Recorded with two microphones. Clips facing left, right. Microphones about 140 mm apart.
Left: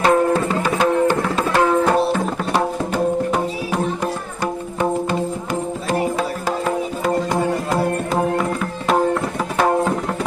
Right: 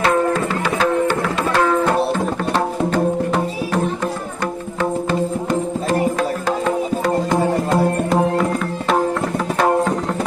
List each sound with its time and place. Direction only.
0.0 s music: 20° left (ahead or behind)
1.5 s tabla: 10° left (ahead or behind)
2.5 s music: 10° left (ahead or behind)
6.7 s music: 5° left (ahead or behind)